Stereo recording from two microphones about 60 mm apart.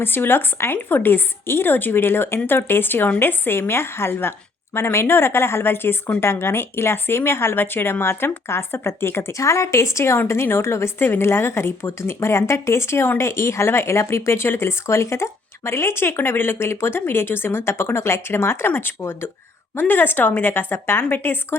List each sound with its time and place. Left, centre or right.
0.0 s a woman's voice: left